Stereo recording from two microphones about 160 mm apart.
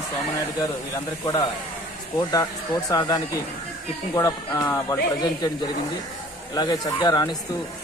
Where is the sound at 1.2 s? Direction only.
20° left (ahead or behind).